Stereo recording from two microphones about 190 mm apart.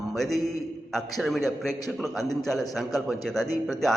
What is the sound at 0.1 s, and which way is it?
A man's voice, centre (ahead or behind).